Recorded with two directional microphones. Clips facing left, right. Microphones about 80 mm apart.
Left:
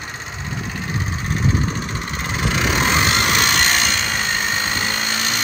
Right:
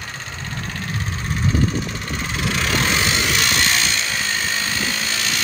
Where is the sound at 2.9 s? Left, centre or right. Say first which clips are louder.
Left 3 dB; left.